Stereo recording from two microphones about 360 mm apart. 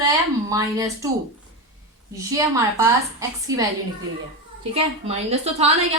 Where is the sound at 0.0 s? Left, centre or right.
Centre.